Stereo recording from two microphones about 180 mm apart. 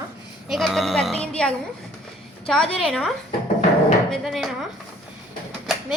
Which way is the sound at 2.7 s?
Centre (ahead or behind).